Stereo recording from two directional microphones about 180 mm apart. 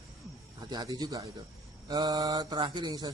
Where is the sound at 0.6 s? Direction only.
20° right (ahead or behind).